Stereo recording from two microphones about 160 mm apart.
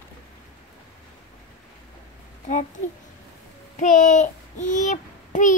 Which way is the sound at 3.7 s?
50° left (ahead or behind).